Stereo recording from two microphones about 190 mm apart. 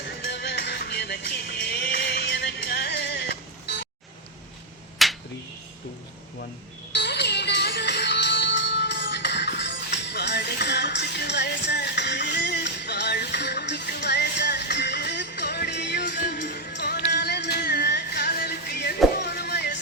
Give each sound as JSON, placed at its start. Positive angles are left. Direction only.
{"t": 0.2, "sound": "music", "side_deg": 65}
{"t": 5.0, "sound": "a sound", "side_deg": 0}
{"t": 6.9, "sound": "music", "side_deg": 65}